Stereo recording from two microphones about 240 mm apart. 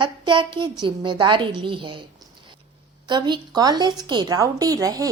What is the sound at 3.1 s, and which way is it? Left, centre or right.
A woman's voice, centre.